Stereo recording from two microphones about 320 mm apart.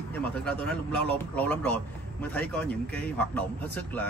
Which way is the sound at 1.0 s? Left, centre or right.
Centre.